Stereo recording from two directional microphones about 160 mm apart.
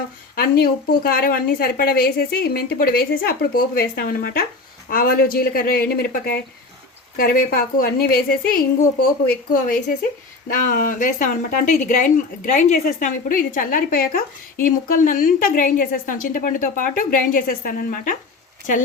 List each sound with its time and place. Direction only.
0.3 s a woman's voice: 70° left (ahead or behind)